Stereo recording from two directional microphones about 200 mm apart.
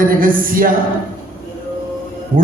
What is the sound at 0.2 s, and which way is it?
Speech, 45° right (ahead or behind).